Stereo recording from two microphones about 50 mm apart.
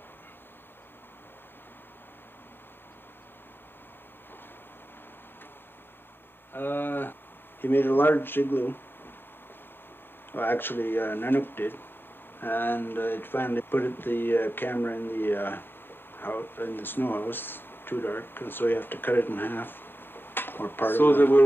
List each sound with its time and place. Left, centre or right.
6.5 s speech: left
10.3 s speech: left